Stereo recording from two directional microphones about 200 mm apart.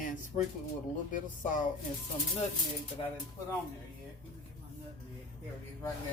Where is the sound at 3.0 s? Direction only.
25° left (ahead or behind).